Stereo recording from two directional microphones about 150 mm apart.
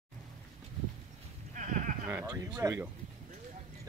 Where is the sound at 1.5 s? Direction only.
55° right (ahead or behind).